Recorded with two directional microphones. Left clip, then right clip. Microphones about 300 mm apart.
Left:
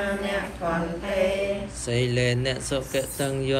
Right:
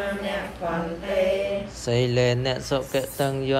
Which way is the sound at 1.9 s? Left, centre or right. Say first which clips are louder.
Right 3 dB; centre.